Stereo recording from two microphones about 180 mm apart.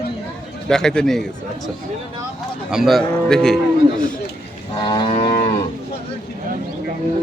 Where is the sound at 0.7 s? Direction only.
5° left (ahead or behind).